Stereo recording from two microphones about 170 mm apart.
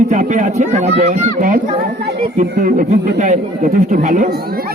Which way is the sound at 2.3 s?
50° right (ahead or behind).